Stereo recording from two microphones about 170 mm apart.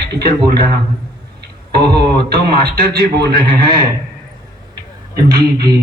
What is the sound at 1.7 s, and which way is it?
A man's voice, 70° right (ahead or behind).